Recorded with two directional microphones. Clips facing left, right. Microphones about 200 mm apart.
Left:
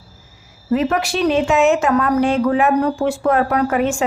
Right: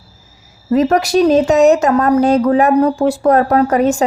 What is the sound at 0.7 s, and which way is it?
A woman's voice, 40° right (ahead or behind).